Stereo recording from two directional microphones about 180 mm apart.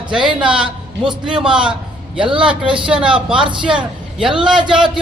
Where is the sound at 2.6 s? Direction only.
30° right (ahead or behind).